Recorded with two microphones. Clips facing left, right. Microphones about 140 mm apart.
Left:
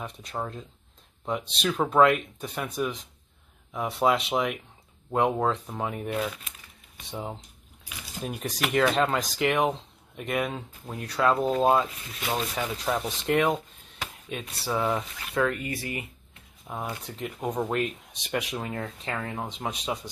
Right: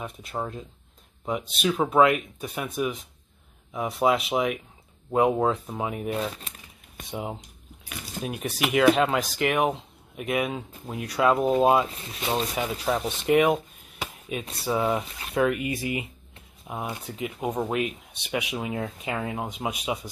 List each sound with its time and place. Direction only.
0.0 s speech: 5° right (ahead or behind)
6.1 s speech: 30° right (ahead or behind)
7.1 s speech: 10° right (ahead or behind)
12.2 s speech: 25° right (ahead or behind)
12.5 s speech: 10° right (ahead or behind)